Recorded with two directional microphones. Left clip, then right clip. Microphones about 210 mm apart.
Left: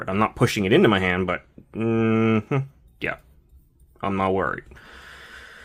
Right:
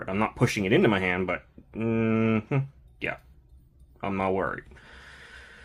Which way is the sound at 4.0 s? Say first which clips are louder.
Left 4 dB; 25° left (ahead or behind).